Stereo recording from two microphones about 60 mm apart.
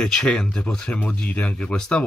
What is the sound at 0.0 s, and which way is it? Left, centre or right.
Speech, centre.